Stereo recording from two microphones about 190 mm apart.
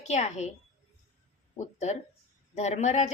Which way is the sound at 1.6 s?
35° left (ahead or behind).